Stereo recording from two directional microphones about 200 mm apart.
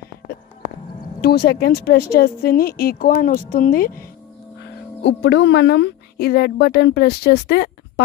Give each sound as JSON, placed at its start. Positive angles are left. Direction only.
{"t": 1.2, "sound": "speech", "side_deg": 55}
{"t": 5.0, "sound": "speech", "side_deg": 60}